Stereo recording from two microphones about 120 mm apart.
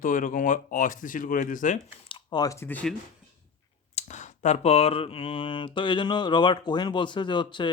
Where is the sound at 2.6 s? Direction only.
15° left (ahead or behind).